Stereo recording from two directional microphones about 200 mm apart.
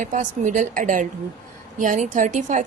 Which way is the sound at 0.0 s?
40° right (ahead or behind).